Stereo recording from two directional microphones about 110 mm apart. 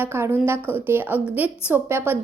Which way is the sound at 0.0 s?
20° right (ahead or behind).